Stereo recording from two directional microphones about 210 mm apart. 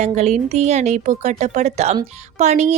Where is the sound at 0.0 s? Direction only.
35° right (ahead or behind).